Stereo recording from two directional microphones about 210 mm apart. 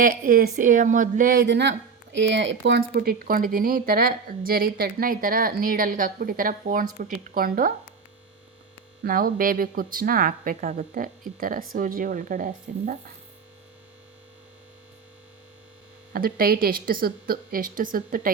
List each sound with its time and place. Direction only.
0.0 s speech: 40° right (ahead or behind)
9.0 s speech: 45° right (ahead or behind)
16.1 s speech: 45° right (ahead or behind)